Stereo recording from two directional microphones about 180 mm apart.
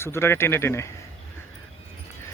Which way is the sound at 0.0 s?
15° left (ahead or behind).